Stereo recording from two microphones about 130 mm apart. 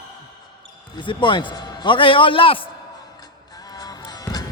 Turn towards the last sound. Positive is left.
turn(degrees=30)  # may be behind; listen again after turning